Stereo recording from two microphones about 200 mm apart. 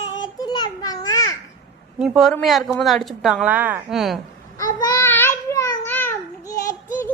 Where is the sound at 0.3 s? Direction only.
20° left (ahead or behind).